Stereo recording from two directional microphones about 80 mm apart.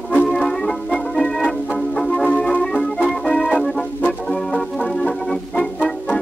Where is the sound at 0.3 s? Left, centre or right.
Centre.